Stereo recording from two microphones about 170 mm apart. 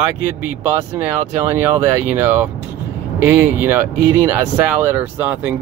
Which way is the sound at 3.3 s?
10° right (ahead or behind).